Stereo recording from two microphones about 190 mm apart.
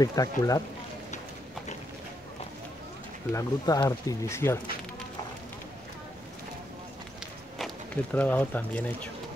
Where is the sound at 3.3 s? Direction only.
20° left (ahead or behind).